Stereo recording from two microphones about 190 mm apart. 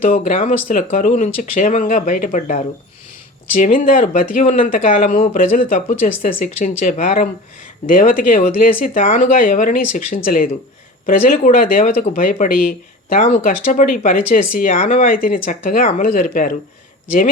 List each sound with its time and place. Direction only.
0.0 s speech: 45° left (ahead or behind)